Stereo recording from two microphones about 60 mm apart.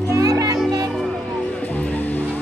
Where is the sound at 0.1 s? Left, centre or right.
Right.